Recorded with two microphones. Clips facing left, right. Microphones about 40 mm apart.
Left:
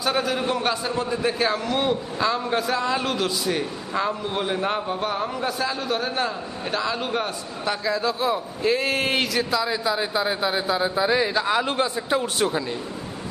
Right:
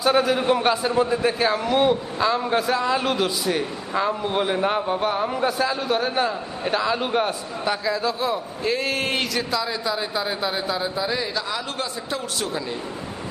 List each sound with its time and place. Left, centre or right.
0.0 s a man's voice: centre; by 12.6 s left